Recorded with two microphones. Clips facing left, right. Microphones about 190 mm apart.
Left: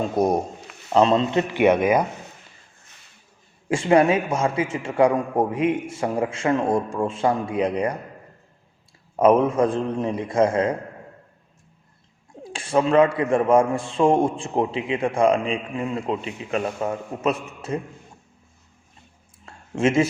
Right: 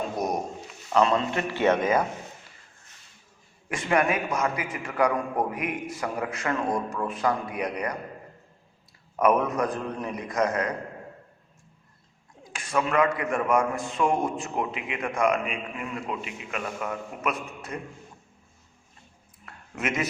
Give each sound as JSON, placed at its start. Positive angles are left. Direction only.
{"t": 0.2, "sound": "a man's voice", "side_deg": 30}
{"t": 3.7, "sound": "a man's voice", "side_deg": 30}
{"t": 9.1, "sound": "a man's voice", "side_deg": 25}
{"t": 12.3, "sound": "a man's voice", "side_deg": 30}
{"t": 19.5, "sound": "a sound", "side_deg": 30}